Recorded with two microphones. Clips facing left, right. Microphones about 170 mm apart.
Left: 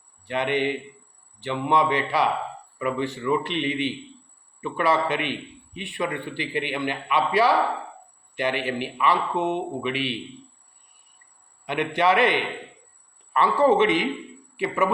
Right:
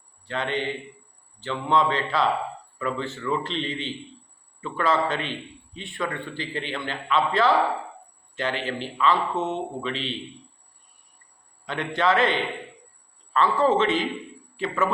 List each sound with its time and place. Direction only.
0.3 s a man's voice: 15° left (ahead or behind)
11.6 s a man's voice: 15° left (ahead or behind)